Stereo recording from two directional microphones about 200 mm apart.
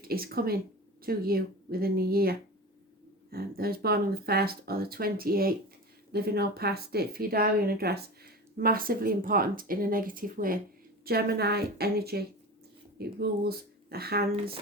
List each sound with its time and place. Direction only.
0.0 s speech: 50° right (ahead or behind)